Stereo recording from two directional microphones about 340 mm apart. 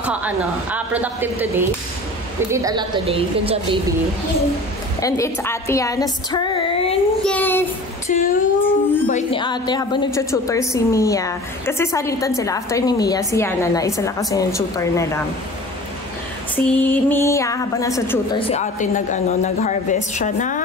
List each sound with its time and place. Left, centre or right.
0.0 s a woman's voice: centre
5.0 s a woman's voice: centre
7.2 s child singing: centre
8.1 s a sound: left
9.0 s a woman's voice: centre
16.5 s a woman's voice: centre; by 20.6 s left